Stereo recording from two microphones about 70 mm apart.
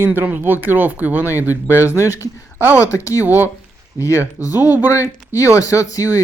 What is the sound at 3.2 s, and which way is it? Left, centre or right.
Speech, right.